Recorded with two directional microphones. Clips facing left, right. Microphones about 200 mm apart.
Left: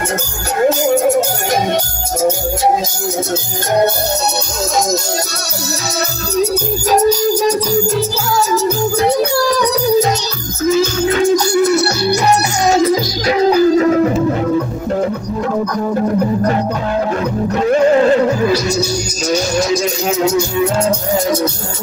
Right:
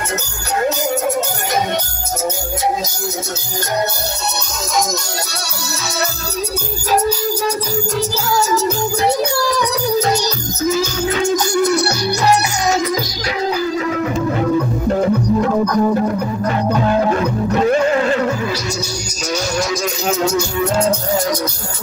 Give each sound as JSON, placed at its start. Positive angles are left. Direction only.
{"t": 0.7, "sound": "music", "side_deg": 50}
{"t": 11.5, "sound": "music", "side_deg": 5}
{"t": 13.3, "sound": "music", "side_deg": 45}